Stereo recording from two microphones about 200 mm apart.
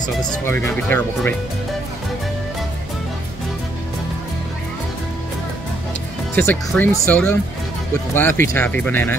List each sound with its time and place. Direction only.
0.0 s speech: 15° left (ahead or behind)
6.3 s speech: 10° left (ahead or behind)